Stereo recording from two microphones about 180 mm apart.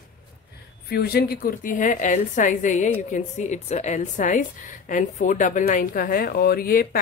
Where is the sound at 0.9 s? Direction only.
60° left (ahead or behind).